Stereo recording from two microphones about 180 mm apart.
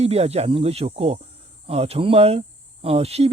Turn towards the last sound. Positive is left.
turn(degrees=-35)  # may be behind; listen again after turning